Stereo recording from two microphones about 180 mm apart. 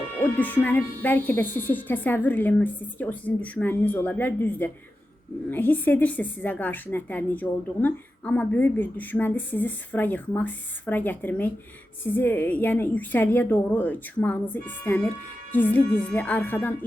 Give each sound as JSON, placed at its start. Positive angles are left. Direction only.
{"t": 0.2, "sound": "a woman's voice", "side_deg": 10}